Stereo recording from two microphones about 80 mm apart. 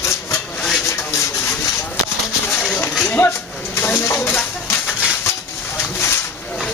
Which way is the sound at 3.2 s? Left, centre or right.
Left.